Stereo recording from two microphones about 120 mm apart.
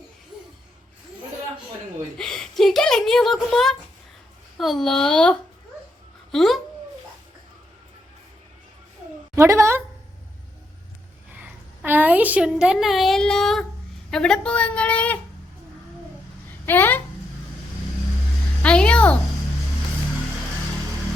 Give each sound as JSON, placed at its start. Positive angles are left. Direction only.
{"t": 2.1, "sound": "speech", "side_deg": 5}
{"t": 9.3, "sound": "a woman's voice", "side_deg": -25}
{"t": 11.3, "sound": "a woman's voice", "side_deg": -10}
{"t": 16.6, "sound": "a woman's voice", "side_deg": 15}
{"t": 18.6, "sound": "a sound", "side_deg": 10}